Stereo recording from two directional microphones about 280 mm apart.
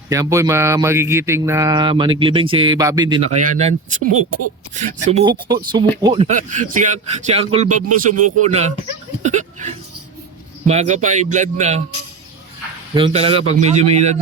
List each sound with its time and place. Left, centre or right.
0.1 s speech: centre
3.3 s speech: right
5.2 s speech: centre
7.7 s a man's voice: right
8.4 s speech: right
9.2 s hiccup: right
10.7 s speech: right
12.9 s speech: centre